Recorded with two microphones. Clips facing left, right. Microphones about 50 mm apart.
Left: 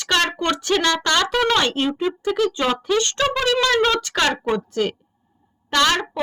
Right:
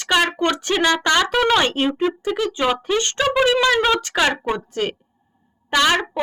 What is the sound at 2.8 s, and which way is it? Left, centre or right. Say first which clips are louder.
Speech: left 1 dB; right.